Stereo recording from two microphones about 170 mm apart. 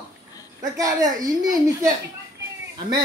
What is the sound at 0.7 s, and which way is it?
A woman's voice, 20° right (ahead or behind).